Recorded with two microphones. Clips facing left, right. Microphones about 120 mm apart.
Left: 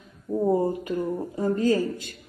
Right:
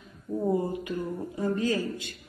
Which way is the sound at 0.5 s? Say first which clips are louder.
Left 4 dB; 40° left (ahead or behind).